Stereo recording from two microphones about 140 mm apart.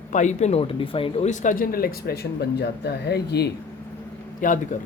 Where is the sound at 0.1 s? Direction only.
60° left (ahead or behind); by 1.3 s 40° left (ahead or behind).